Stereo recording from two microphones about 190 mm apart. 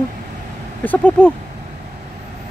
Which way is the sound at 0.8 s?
5° left (ahead or behind).